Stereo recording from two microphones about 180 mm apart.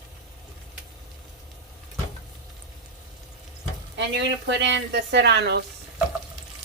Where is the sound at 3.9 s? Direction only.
75° right (ahead or behind).